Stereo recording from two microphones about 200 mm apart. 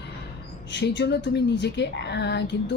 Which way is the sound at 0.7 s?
60° left (ahead or behind).